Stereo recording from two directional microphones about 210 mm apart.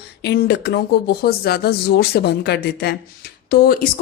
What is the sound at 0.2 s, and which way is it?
A woman's voice, 55° left (ahead or behind).